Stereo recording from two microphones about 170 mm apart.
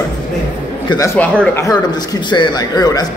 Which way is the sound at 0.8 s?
20° left (ahead or behind).